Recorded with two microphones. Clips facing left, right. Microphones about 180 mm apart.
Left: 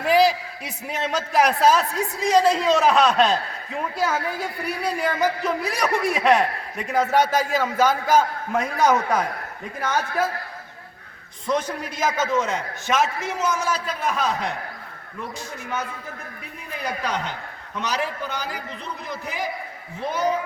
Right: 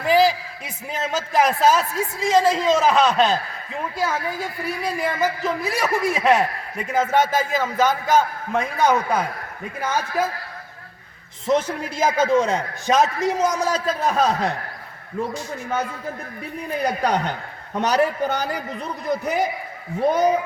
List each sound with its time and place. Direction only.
0.0 s a man's voice: centre (ahead or behind)
4.8 s a man's voice: centre (ahead or behind)
11.4 s a man's voice: 25° right (ahead or behind)
16.7 s a man's voice: 40° right (ahead or behind)